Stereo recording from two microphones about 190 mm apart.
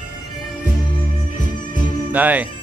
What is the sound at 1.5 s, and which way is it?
Music, 45° left (ahead or behind).